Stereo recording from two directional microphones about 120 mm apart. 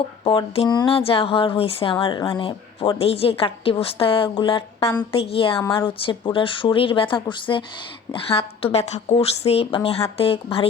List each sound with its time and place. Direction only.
0.3 s a woman's voice: 50° left (ahead or behind)